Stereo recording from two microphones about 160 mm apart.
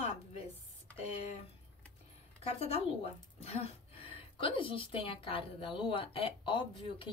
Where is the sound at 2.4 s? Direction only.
40° left (ahead or behind).